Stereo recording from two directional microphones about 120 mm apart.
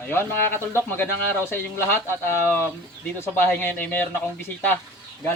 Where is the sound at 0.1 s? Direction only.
20° left (ahead or behind).